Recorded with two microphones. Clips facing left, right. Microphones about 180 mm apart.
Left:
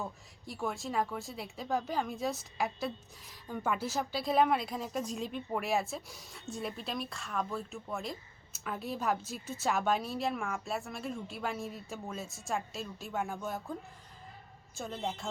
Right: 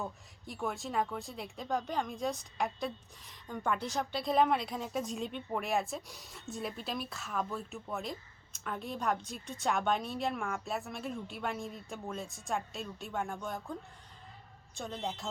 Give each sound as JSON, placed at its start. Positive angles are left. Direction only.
{"t": 0.0, "sound": "speech", "side_deg": 0}
{"t": 14.8, "sound": "speech", "side_deg": 0}